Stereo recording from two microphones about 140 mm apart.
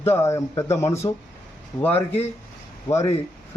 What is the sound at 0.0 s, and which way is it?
Speech, 20° left (ahead or behind).